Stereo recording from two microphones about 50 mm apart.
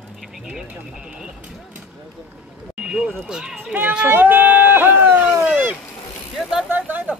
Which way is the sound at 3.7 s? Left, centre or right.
Right.